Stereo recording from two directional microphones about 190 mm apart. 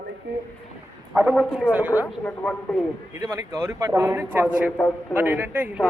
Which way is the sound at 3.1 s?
15° right (ahead or behind).